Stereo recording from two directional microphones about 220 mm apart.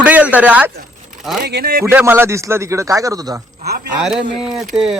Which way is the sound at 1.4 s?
45° right (ahead or behind).